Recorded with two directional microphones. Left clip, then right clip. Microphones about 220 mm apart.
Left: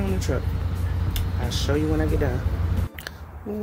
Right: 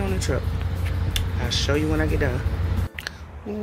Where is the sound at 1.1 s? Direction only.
5° left (ahead or behind).